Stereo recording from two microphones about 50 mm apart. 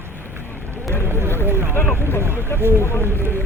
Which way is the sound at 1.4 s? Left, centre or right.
Right.